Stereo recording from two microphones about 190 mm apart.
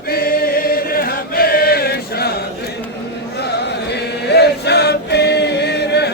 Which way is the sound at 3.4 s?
60° left (ahead or behind).